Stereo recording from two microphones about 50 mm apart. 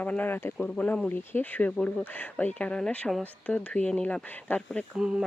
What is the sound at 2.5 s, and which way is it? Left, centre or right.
Speech, left.